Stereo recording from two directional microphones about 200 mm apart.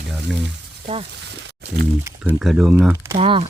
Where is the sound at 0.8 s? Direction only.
30° right (ahead or behind).